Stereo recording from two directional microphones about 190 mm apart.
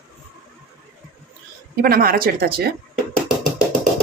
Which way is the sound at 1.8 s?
50° right (ahead or behind).